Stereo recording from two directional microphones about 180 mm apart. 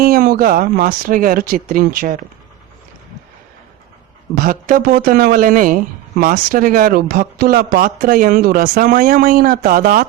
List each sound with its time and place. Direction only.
0.0 s speech: 55° right (ahead or behind)
4.4 s speech: 50° right (ahead or behind)